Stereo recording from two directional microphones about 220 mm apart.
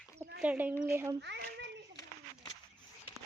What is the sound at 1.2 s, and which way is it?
Hands, 50° right (ahead or behind).